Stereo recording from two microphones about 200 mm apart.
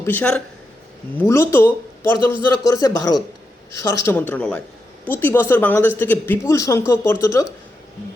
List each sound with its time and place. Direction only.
0.0 s speech: 10° left (ahead or behind)